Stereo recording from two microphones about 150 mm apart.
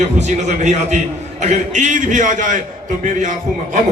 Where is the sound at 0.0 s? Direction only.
50° right (ahead or behind).